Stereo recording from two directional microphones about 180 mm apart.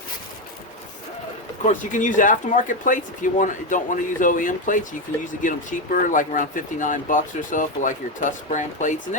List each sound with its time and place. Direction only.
1.6 s speech: 45° left (ahead or behind)